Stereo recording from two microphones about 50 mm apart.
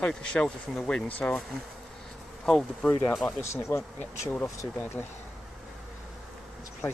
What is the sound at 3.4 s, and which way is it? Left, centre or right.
Speech, left.